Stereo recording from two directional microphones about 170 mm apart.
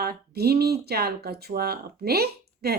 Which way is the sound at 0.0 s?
70° right (ahead or behind).